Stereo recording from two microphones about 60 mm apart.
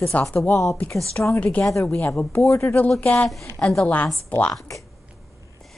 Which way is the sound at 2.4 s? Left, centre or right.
Left.